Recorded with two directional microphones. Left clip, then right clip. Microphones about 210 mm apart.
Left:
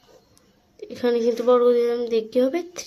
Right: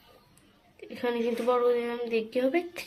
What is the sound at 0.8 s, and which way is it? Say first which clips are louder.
Speech: left 8 dB; 50° left (ahead or behind).